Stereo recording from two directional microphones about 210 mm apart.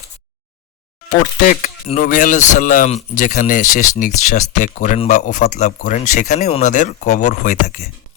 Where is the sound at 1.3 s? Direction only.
35° left (ahead or behind).